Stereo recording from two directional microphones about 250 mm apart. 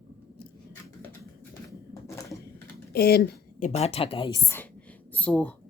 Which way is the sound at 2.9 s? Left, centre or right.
Left.